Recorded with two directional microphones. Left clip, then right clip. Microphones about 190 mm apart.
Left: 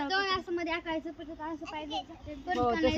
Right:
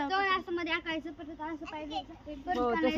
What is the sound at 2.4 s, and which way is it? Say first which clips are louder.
Speech: left 1 dB; 20° right (ahead or behind).